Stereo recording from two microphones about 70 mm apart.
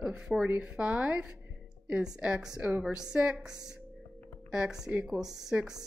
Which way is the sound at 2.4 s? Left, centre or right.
Centre.